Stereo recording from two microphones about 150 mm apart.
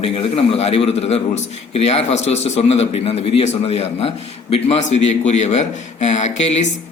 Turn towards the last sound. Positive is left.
turn(degrees=50)  # may be behind; listen again after turning